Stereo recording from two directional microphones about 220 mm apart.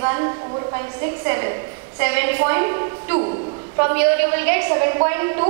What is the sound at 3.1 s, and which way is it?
Speech, 30° right (ahead or behind).